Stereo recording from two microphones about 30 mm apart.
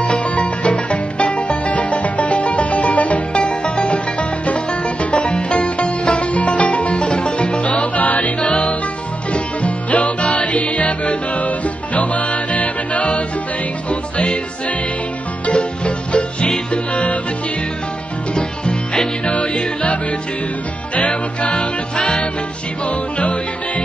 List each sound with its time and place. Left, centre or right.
0.1 s music: left
3.3 s music: left
8.4 s music: left
9.3 s music: left
15.4 s music: left
19.2 s music: left
20.9 s music: left
22.8 s music: left